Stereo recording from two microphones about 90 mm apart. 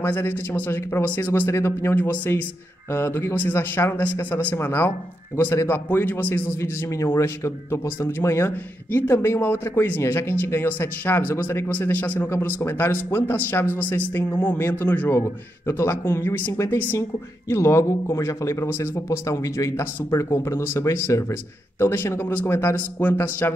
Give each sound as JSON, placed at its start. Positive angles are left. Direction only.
{"t": 0.0, "sound": "speech", "side_deg": 25}